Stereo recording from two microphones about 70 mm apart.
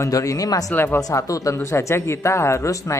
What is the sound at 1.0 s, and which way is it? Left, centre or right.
Speech, left.